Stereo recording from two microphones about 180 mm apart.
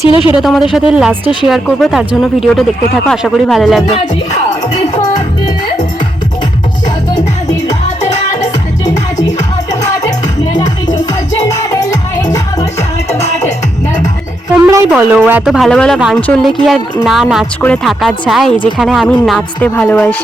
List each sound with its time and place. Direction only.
0.1 s speech: 30° left (ahead or behind)
0.3 s speech: centre (ahead or behind)
10.6 s music: 20° left (ahead or behind)
14.7 s speech: 10° right (ahead or behind); by 20.1 s 10° left (ahead or behind)